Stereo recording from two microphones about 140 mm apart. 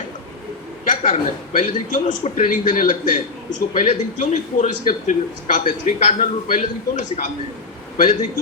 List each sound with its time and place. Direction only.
0.9 s a man's voice: 60° left (ahead or behind)